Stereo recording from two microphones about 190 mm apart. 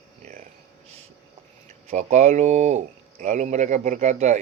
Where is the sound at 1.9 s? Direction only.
40° right (ahead or behind).